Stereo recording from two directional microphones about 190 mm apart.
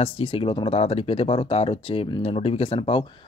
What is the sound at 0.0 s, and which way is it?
Speech, 30° left (ahead or behind).